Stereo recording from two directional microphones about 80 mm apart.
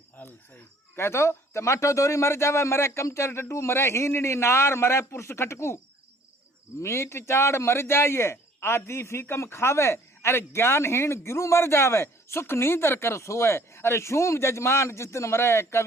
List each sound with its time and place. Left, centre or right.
0.2 s speech: left